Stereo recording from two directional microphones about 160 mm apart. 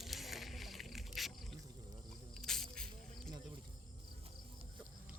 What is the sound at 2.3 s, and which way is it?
Snake, centre (ahead or behind).